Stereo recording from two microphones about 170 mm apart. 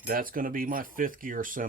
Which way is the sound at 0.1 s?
55° right (ahead or behind).